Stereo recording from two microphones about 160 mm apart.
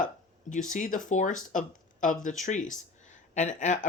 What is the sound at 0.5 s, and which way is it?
Speech, 55° left (ahead or behind).